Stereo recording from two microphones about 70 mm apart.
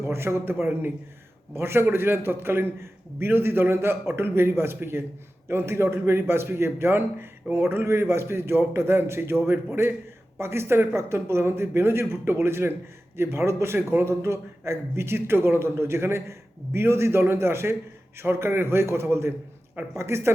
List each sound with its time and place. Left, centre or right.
0.0 s a man's voice: right
10.3 s a man's voice: right